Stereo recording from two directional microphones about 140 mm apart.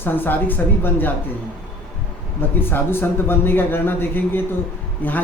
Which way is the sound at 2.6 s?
15° left (ahead or behind).